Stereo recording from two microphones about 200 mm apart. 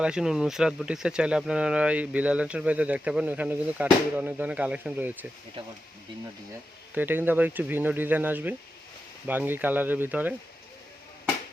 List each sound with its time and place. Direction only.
0.0 s speech: 5° right (ahead or behind)
5.6 s speech: 30° right (ahead or behind)
6.9 s speech: 10° right (ahead or behind)